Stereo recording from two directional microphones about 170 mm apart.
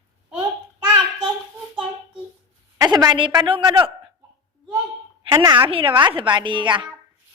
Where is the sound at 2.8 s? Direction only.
25° right (ahead or behind).